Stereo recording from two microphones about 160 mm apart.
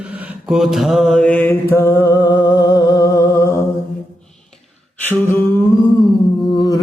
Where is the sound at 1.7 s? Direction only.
15° left (ahead or behind).